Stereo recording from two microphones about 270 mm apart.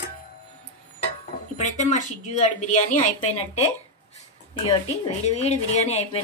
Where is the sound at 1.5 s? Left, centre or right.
Left.